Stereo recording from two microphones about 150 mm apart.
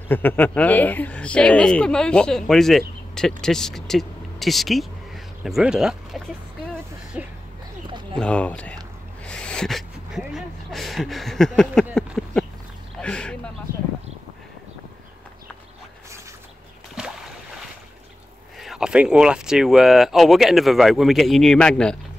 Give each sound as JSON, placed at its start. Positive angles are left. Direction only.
{"t": 0.1, "sound": "speech", "side_deg": 10}
{"t": 7.2, "sound": "music", "side_deg": -10}
{"t": 7.9, "sound": "a sound", "side_deg": -30}
{"t": 8.2, "sound": "speech", "side_deg": 10}
{"t": 9.2, "sound": "a sound", "side_deg": 5}
{"t": 18.6, "sound": "speech", "side_deg": -5}